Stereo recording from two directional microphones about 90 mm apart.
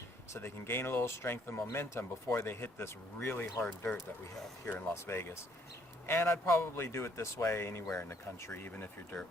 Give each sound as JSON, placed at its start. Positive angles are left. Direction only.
{"t": 0.3, "sound": "speech", "side_deg": 25}
{"t": 5.0, "sound": "speech", "side_deg": 30}